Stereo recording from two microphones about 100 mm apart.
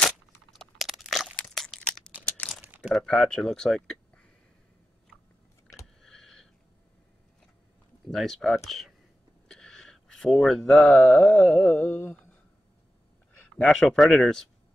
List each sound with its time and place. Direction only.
0.6 s crunch: centre (ahead or behind)
2.6 s crumpling: 15° right (ahead or behind)
2.9 s speech: 5° left (ahead or behind)
6.0 s a sound: 5° left (ahead or behind)
8.1 s speech: centre (ahead or behind)
9.5 s a sound: 5° left (ahead or behind)
10.6 s speech: 15° left (ahead or behind)
13.3 s speech: 10° left (ahead or behind)